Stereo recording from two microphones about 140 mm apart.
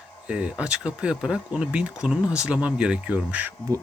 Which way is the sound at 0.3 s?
10° right (ahead or behind).